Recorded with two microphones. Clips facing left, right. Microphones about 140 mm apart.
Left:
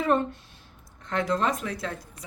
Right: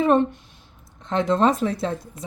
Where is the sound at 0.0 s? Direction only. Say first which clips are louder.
Right 6 dB; 20° right (ahead or behind).